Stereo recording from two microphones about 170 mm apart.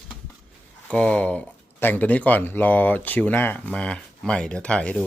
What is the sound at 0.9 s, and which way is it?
Speech, 5° left (ahead or behind).